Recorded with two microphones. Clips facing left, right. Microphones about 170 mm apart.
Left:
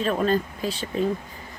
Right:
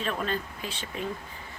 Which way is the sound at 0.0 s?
40° left (ahead or behind).